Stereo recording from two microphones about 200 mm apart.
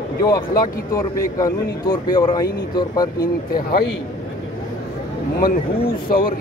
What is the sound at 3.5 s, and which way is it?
Speech, 50° left (ahead or behind).